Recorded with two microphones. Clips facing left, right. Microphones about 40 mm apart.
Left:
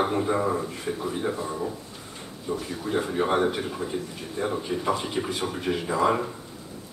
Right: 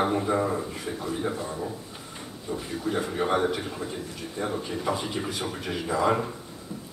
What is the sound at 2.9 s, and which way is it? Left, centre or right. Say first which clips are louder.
A man's voice: left 2 dB; centre.